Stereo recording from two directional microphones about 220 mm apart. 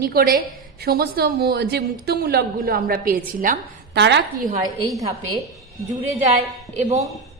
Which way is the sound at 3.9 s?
50° right (ahead or behind).